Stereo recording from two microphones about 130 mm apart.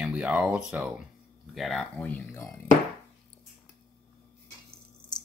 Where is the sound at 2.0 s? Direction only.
10° left (ahead or behind).